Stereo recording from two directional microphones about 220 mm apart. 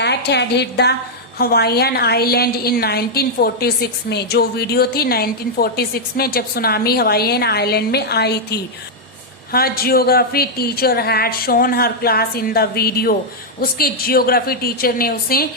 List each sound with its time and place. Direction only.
0.0 s a woman's voice: 50° left (ahead or behind)